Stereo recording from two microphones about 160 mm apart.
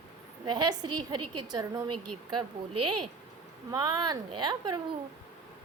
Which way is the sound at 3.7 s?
25° right (ahead or behind).